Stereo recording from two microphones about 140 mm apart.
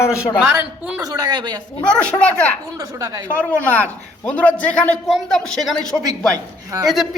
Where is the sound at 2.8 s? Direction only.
25° right (ahead or behind).